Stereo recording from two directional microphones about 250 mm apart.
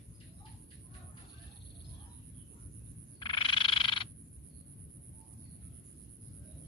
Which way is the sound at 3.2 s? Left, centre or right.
Centre.